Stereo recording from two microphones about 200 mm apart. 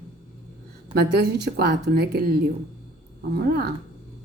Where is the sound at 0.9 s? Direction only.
55° right (ahead or behind).